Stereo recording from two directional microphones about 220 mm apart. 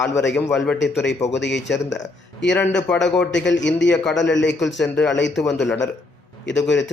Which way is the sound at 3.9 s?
5° left (ahead or behind).